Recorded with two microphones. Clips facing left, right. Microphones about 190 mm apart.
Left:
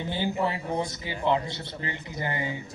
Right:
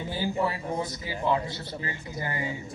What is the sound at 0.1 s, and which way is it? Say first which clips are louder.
A man's voice: even; 20° left (ahead or behind).